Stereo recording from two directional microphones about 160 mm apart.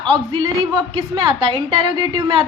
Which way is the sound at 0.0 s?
30° right (ahead or behind).